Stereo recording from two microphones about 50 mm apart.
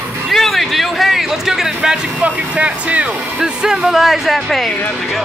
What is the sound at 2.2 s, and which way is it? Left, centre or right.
Speech, right.